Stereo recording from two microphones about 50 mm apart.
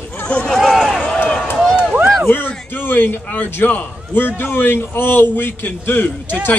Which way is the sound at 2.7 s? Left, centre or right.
Left.